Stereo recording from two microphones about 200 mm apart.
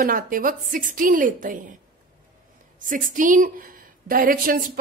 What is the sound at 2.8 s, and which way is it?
A woman's voice, 40° right (ahead or behind).